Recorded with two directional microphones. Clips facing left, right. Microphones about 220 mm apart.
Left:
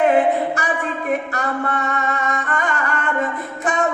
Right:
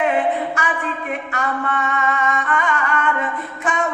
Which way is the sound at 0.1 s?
40° left (ahead or behind).